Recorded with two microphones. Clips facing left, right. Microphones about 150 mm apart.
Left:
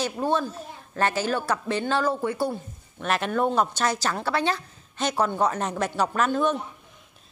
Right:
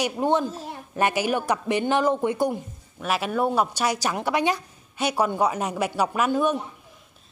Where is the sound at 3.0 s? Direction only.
5° right (ahead or behind).